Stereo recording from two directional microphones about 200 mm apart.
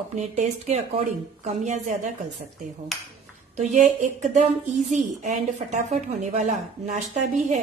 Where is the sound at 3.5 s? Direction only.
35° right (ahead or behind).